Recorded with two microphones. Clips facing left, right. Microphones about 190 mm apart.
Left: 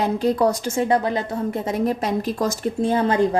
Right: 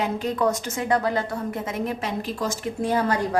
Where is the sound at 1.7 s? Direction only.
40° left (ahead or behind).